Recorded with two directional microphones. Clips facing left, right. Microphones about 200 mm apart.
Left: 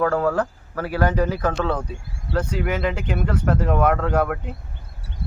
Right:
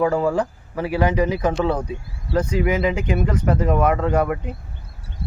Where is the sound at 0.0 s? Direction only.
10° right (ahead or behind).